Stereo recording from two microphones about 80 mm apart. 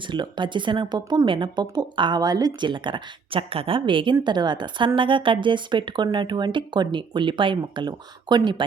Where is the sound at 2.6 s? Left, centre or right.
Right.